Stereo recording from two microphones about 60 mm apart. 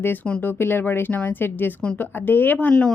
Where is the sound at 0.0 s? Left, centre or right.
Left.